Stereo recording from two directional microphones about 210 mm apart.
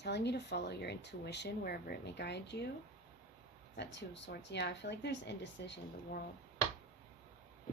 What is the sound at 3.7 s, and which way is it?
Speech, 55° left (ahead or behind).